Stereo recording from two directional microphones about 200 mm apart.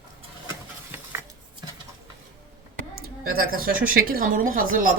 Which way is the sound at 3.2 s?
45° right (ahead or behind).